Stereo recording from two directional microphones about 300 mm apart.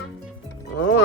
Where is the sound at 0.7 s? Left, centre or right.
Left.